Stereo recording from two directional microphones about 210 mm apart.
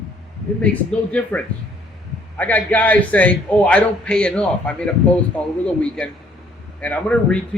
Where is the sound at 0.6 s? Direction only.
5° left (ahead or behind).